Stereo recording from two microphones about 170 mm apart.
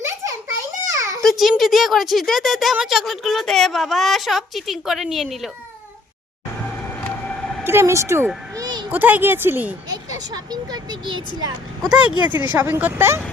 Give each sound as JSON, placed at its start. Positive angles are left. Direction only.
{"t": 0.9, "sound": "a sound", "side_deg": -15}
{"t": 1.2, "sound": "speech", "side_deg": 0}
{"t": 7.6, "sound": "a woman's voice", "side_deg": -15}
{"t": 8.5, "sound": "a sound", "side_deg": -25}
{"t": 8.9, "sound": "a woman's voice", "side_deg": -10}
{"t": 10.3, "sound": "speech", "side_deg": -25}
{"t": 11.8, "sound": "speech", "side_deg": -5}
{"t": 12.3, "sound": "speech", "side_deg": 25}
{"t": 12.5, "sound": "a woman's voice", "side_deg": -15}